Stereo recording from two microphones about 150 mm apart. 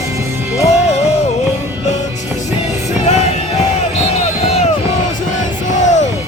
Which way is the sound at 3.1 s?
45° left (ahead or behind).